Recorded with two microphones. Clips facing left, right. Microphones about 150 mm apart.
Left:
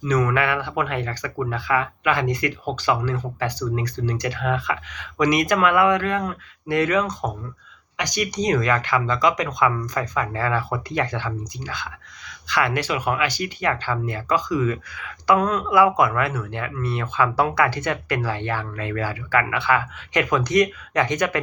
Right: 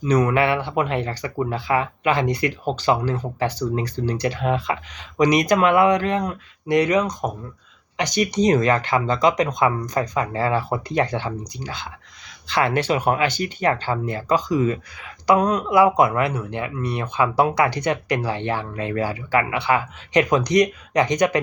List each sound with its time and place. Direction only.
0.3 s speech: 25° right (ahead or behind)
7.9 s speech: 25° right (ahead or behind)